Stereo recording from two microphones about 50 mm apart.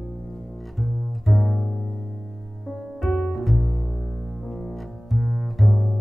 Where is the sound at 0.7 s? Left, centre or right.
Centre.